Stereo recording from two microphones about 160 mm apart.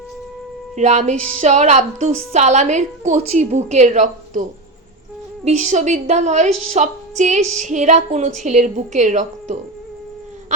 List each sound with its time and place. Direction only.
0.8 s a woman's voice: 45° right (ahead or behind)
5.5 s a woman's voice: 50° right (ahead or behind)